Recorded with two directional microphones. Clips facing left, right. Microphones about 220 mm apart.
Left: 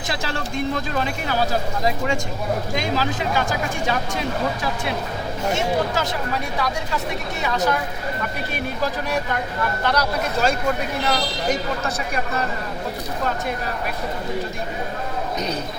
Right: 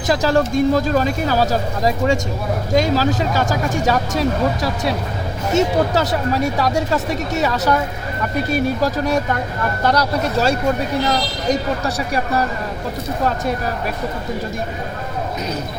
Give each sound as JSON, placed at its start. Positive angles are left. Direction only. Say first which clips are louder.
{"t": 0.1, "sound": "speech", "louder": "right 11 dB", "side_deg": -40}